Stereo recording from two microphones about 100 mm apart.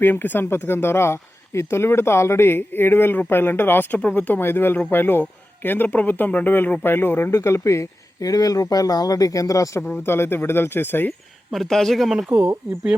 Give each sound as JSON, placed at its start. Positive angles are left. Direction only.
{"t": 0.0, "sound": "speech", "side_deg": 20}
{"t": 9.8, "sound": "speech", "side_deg": 20}
{"t": 11.5, "sound": "speech", "side_deg": 0}
{"t": 12.3, "sound": "speech", "side_deg": -15}